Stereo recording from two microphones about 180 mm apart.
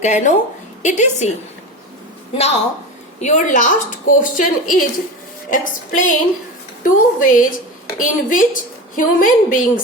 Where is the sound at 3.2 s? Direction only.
40° left (ahead or behind).